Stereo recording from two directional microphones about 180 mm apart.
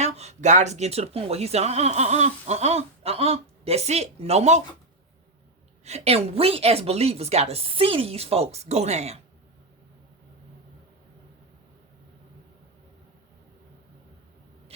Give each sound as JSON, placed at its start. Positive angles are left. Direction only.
{"t": 0.0, "sound": "a woman's voice", "side_deg": -40}
{"t": 5.8, "sound": "a woman's voice", "side_deg": -35}